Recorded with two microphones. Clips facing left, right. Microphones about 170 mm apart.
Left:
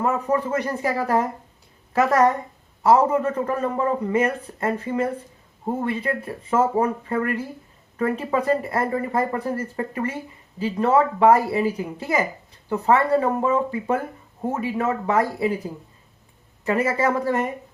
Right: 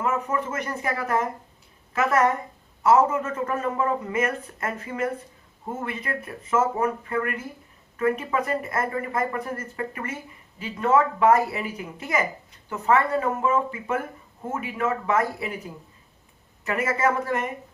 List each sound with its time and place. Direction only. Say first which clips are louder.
0.0 s a man's voice: left 4 dB; 35° left (ahead or behind)
16.6 s a man's voice: left 3 dB; 30° left (ahead or behind)